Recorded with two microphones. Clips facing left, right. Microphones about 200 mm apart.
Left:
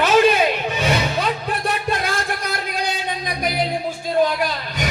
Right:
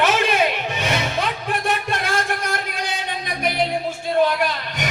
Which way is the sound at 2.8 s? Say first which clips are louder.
Left 2 dB; 40° left (ahead or behind).